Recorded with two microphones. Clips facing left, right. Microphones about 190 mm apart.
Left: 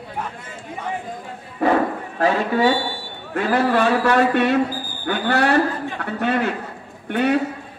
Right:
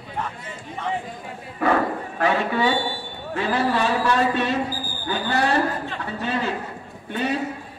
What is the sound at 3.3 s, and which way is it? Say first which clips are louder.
A man's voice: left 4 dB; 60° left (ahead or behind).